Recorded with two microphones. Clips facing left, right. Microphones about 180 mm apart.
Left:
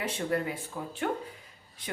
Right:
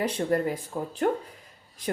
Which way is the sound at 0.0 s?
40° right (ahead or behind).